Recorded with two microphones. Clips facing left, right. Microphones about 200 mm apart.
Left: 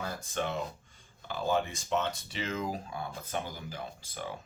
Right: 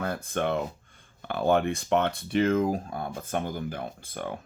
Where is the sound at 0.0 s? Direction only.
60° right (ahead or behind).